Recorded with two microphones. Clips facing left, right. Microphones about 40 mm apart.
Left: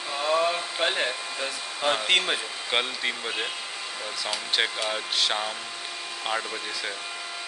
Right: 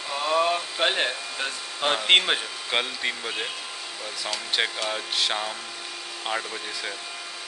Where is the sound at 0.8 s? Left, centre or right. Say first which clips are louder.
Right 2 dB; right.